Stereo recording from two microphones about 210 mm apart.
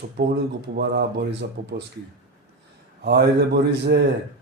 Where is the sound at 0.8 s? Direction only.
50° right (ahead or behind).